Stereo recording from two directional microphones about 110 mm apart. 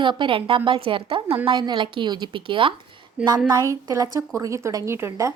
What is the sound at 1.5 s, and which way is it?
A woman's voice, 40° right (ahead or behind).